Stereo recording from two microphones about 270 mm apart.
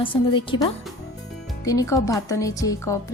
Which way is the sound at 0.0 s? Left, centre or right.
Centre.